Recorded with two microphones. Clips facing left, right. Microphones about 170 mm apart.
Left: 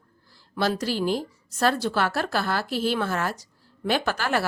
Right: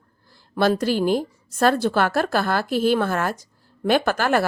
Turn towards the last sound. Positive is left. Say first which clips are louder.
# right 5 dB
turn(degrees=-50)  # may be behind; listen again after turning